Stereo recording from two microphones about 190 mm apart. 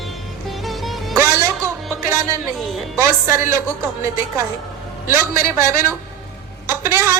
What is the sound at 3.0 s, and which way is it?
Speech, 15° right (ahead or behind).